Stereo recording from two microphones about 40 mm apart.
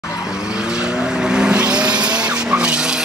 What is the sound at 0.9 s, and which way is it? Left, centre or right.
Vehicle, centre.